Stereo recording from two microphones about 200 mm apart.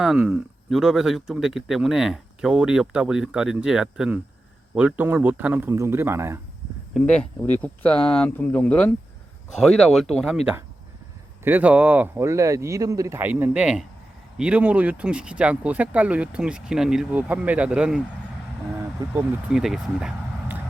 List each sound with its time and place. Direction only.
0.0 s speech: 5° right (ahead or behind)
6.9 s speech: 5° left (ahead or behind)
19.0 s speech: 20° right (ahead or behind)
19.5 s speech: centre (ahead or behind)